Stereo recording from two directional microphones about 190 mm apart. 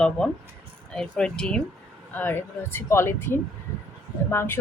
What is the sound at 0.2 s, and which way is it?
A woman's voice, 5° left (ahead or behind).